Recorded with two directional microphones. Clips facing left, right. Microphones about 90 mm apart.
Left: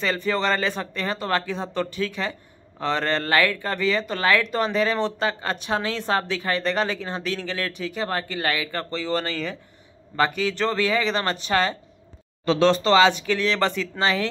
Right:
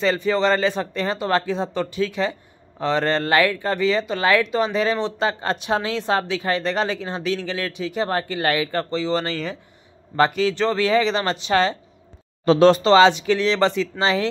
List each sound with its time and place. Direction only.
0.0 s speech: 20° right (ahead or behind)
12.8 s speech: 30° right (ahead or behind)